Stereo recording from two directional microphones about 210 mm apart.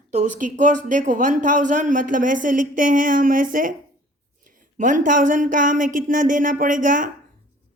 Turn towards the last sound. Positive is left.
turn(degrees=-40)  # may be behind; listen again after turning